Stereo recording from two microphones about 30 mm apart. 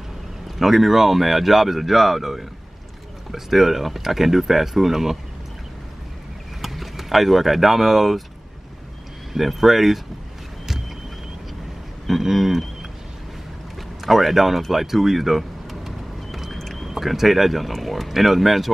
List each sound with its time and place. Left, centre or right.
0.6 s speech: centre
6.6 s speech: centre
9.3 s speech: centre
12.1 s speech: centre
14.0 s speech: centre
14.7 s vehicle: centre
16.5 s a sound: centre
16.8 s speech: centre